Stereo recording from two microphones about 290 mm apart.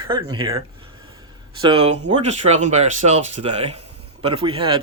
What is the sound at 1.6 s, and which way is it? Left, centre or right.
Speech, centre.